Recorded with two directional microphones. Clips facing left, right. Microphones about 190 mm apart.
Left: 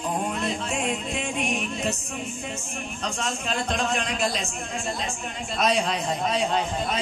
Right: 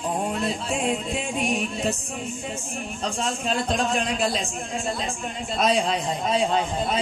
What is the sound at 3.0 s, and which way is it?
A man's voice, 30° right (ahead or behind).